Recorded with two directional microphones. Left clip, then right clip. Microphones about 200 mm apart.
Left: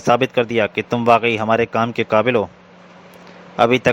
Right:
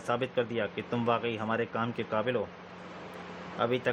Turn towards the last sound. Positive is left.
turn(degrees=40)  # may be behind; listen again after turning